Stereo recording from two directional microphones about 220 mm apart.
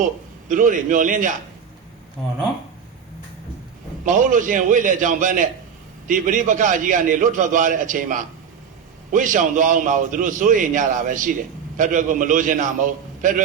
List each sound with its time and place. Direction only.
0.0 s a man's voice: 35° right (ahead or behind)
4.0 s a man's voice: 35° right (ahead or behind)